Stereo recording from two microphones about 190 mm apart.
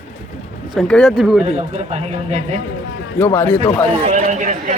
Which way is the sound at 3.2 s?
10° left (ahead or behind).